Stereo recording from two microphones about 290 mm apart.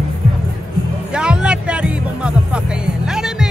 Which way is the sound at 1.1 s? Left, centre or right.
Centre.